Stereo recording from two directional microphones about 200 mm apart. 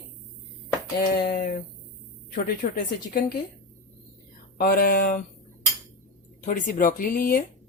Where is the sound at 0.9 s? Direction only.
50° left (ahead or behind).